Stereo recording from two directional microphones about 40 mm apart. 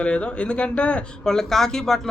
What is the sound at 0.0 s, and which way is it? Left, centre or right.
A man's voice, left.